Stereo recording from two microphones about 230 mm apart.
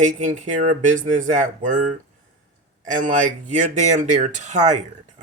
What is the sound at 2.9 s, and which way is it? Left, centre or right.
Speech, right.